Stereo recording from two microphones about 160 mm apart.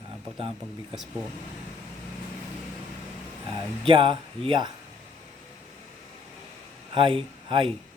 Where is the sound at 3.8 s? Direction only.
35° right (ahead or behind).